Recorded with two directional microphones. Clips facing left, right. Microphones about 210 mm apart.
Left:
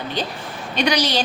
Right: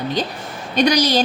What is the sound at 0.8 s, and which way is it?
Speech, 40° right (ahead or behind).